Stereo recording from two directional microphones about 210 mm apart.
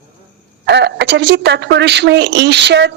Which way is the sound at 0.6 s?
55° right (ahead or behind).